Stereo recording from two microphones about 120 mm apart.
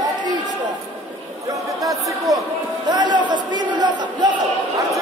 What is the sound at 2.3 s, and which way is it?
Speech, 30° right (ahead or behind).